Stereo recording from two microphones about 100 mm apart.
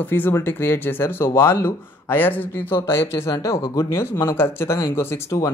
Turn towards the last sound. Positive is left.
turn(degrees=25)  # may be behind; listen again after turning